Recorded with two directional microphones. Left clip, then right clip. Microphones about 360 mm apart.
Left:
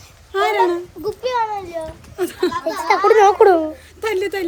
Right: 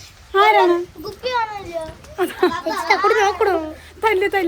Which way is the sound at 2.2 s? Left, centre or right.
Centre.